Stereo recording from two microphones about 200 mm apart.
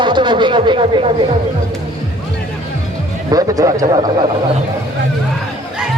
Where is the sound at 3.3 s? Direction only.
15° right (ahead or behind).